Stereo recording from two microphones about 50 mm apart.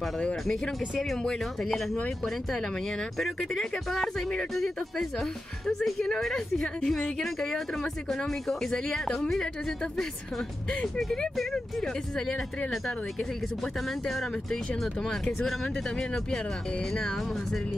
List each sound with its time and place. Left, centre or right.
0.5 s speech: centre
13.6 s speech: centre
15.0 s speech: centre
15.4 s speech: centre
15.7 s speech: centre